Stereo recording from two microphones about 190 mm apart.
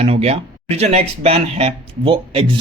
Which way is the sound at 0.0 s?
30° right (ahead or behind).